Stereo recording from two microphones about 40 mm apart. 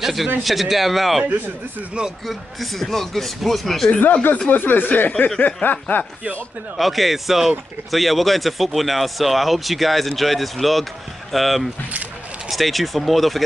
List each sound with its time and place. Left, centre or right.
0.0 s speech: centre
2.2 s speech: centre
4.5 s speech: left
6.8 s speech: centre